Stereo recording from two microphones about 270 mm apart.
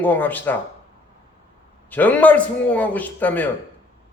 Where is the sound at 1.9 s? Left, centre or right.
Centre.